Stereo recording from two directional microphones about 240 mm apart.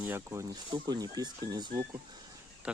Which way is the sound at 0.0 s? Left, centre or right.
Centre.